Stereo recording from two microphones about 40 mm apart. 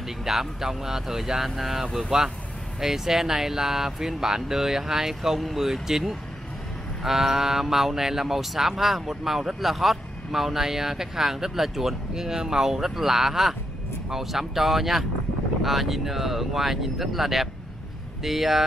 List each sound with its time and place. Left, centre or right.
0.2 s speech: centre